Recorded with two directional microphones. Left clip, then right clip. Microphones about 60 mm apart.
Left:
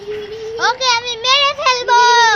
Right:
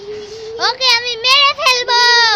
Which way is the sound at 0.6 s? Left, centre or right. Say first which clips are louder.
Left 1 dB; right.